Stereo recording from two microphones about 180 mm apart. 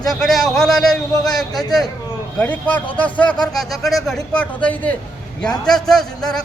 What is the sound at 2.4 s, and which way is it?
A man's voice, 10° left (ahead or behind).